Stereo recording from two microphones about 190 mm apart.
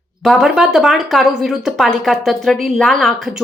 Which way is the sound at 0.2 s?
Centre (ahead or behind).